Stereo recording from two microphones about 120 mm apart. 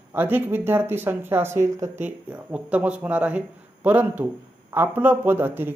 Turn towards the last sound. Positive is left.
turn(degrees=-15)  # may be behind; listen again after turning